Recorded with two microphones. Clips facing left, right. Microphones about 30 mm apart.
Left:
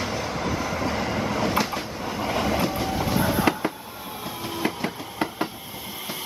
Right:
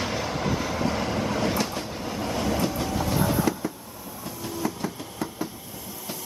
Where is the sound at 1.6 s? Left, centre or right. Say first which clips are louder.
Left 2 dB; centre.